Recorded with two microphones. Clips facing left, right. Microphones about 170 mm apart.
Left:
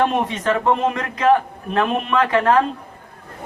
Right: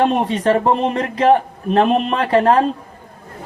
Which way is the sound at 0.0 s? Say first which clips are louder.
Right 3 dB; 35° right (ahead or behind).